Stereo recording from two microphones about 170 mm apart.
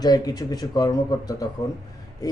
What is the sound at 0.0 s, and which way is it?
Speech, 25° left (ahead or behind).